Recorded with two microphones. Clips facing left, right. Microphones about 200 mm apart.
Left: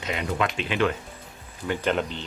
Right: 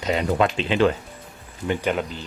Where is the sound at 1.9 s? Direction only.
5° right (ahead or behind).